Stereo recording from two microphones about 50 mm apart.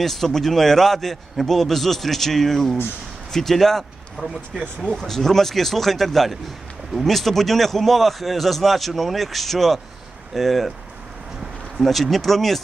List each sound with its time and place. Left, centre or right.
0.0 s a man's voice: centre
4.2 s speech: right
4.9 s a man's voice: centre
11.8 s a man's voice: centre